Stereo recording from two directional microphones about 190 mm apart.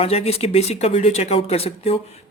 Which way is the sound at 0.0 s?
30° left (ahead or behind).